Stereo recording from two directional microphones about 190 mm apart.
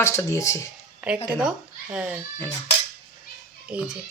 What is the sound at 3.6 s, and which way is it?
Speech, 5° right (ahead or behind).